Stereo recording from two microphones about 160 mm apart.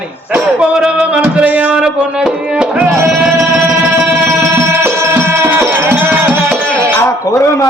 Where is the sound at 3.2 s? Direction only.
10° right (ahead or behind).